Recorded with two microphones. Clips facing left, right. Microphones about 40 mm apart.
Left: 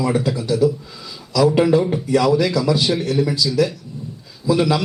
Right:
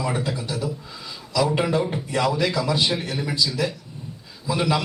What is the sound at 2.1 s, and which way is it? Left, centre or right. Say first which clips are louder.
A man's voice: left 7 dB; right.